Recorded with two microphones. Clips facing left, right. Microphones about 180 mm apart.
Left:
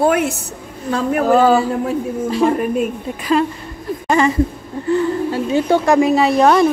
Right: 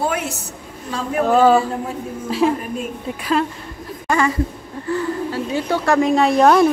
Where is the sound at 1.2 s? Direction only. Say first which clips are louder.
Even; centre (ahead or behind).